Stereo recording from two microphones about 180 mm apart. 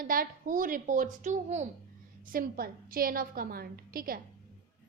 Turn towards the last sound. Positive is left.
turn(degrees=-55)  # may be behind; listen again after turning